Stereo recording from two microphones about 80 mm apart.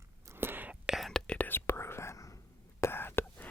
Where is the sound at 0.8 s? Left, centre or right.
Centre.